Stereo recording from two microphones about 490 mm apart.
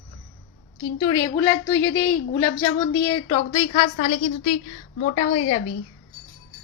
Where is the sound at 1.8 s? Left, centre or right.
Left.